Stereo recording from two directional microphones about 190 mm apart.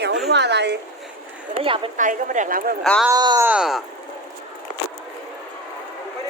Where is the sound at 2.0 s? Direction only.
45° right (ahead or behind).